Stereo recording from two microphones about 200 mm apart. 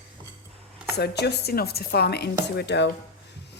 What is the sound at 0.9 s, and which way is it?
Speech, 55° left (ahead or behind).